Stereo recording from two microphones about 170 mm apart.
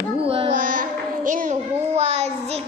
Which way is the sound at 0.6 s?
50° right (ahead or behind).